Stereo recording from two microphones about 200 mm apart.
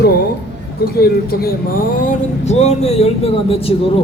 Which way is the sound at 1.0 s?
50° left (ahead or behind).